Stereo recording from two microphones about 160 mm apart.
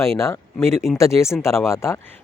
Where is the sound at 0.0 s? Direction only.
15° left (ahead or behind).